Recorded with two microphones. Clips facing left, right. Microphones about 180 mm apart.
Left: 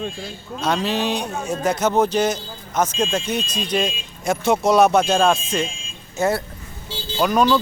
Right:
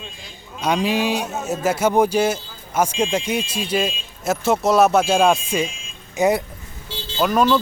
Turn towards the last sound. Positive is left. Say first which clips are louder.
# even
turn(degrees=-5)  # may be behind; listen again after turning